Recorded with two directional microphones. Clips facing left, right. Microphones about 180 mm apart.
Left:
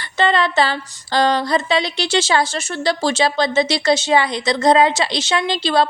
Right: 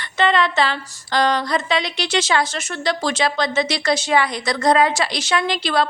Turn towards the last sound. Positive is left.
turn(degrees=30)  # may be behind; listen again after turning